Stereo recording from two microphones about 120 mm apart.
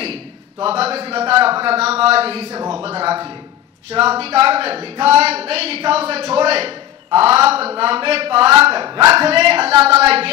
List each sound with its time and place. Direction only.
0.0 s a man's voice: 55° right (ahead or behind)
8.8 s speech: 35° right (ahead or behind)
9.2 s a man's voice: 55° right (ahead or behind)